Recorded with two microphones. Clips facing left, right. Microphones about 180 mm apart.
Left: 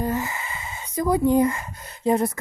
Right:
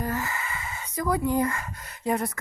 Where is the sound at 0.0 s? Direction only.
20° left (ahead or behind).